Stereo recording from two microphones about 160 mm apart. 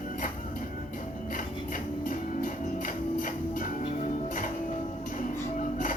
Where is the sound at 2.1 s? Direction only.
60° left (ahead or behind).